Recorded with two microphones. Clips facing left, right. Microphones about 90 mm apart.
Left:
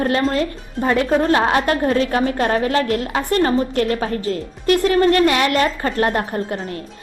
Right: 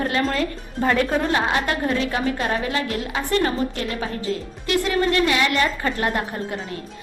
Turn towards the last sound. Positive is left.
turn(degrees=40)  # may be behind; listen again after turning